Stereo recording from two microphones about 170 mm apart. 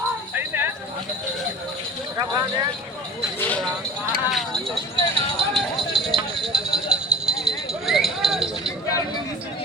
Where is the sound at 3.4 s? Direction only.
10° left (ahead or behind).